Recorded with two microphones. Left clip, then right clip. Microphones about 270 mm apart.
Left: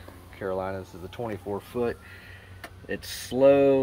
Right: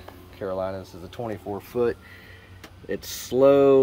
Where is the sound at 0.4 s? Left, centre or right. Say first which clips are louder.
Right 2 dB; centre.